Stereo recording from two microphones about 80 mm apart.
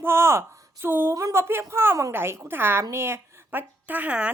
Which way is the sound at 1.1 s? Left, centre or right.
Right.